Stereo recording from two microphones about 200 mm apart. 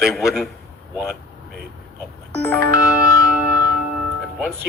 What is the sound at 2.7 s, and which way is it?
Music, 15° left (ahead or behind).